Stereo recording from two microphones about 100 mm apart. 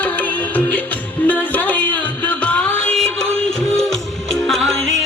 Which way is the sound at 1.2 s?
15° left (ahead or behind).